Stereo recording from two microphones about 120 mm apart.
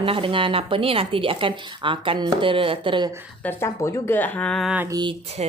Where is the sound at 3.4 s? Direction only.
20° left (ahead or behind).